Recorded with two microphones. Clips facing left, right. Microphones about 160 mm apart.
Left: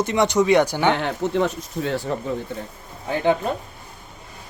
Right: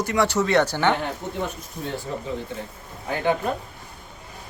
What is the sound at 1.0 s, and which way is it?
Speech, 90° left.